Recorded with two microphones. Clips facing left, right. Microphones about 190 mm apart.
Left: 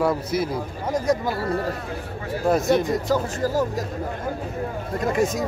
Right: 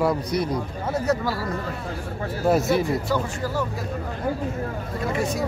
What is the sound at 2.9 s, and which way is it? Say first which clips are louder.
Speech: left 2 dB; 40° left (ahead or behind).